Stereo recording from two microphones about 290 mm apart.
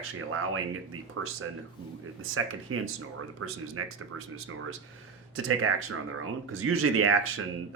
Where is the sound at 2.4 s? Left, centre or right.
Right.